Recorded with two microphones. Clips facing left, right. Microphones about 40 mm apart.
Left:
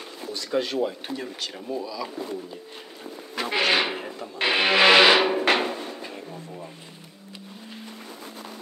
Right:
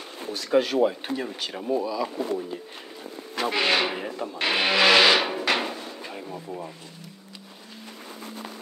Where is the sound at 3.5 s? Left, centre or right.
Centre.